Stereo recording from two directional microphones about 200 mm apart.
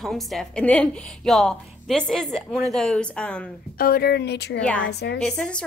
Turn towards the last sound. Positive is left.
turn(degrees=5)  # may be behind; listen again after turning